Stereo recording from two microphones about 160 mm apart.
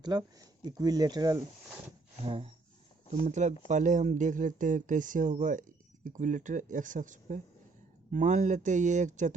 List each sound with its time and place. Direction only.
0.0 s speech: 25° right (ahead or behind)
2.2 s speech: 35° right (ahead or behind)
3.1 s speech: 45° right (ahead or behind)